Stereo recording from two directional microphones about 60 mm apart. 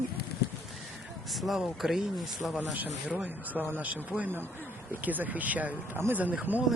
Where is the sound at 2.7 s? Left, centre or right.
Right.